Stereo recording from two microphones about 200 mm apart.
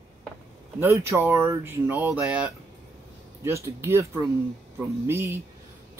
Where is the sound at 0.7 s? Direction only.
15° right (ahead or behind).